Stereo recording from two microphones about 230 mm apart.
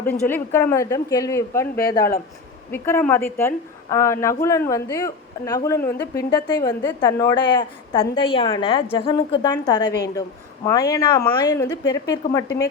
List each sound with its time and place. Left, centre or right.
0.0 s a woman's voice: centre